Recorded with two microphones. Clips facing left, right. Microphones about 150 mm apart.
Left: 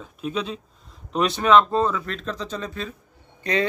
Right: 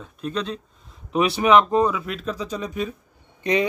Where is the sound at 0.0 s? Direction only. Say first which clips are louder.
Even; 5° left (ahead or behind).